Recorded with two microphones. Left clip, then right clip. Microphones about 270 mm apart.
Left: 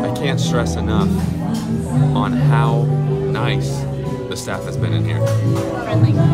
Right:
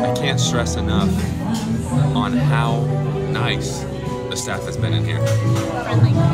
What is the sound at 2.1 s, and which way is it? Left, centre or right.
Speech, centre.